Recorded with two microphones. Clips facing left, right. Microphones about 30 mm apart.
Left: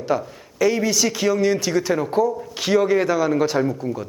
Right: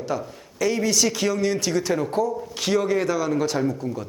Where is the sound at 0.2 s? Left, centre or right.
Centre.